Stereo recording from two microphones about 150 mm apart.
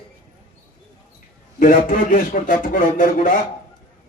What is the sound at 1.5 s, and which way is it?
A man's voice, 65° left (ahead or behind).